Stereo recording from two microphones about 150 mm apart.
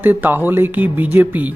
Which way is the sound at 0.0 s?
15° right (ahead or behind).